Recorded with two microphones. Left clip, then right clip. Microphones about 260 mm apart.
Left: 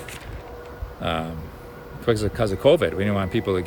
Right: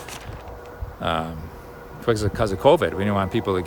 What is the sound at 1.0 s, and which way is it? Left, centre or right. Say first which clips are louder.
Speech: right 2 dB; centre.